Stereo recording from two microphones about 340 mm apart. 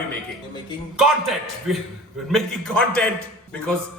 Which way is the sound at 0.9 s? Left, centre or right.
Centre.